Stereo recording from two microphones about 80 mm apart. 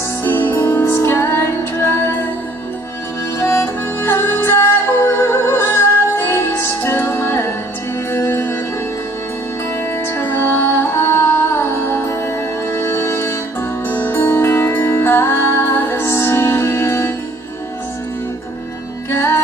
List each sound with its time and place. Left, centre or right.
0.2 s music: left
3.3 s music: left
10.1 s music: left
19.0 s music: left